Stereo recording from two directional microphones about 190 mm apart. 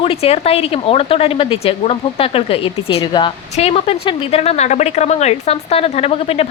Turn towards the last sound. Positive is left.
turn(degrees=30)  # may be behind; listen again after turning